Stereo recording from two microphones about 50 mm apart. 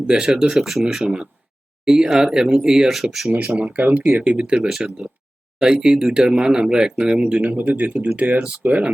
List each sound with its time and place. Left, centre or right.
0.1 s speech: centre
3.3 s speech: right; by 7.2 s centre
7.2 s speech: centre
7.4 s speech: right